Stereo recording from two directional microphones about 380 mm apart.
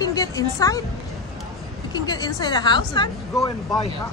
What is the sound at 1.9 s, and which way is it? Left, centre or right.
A woman's voice, centre.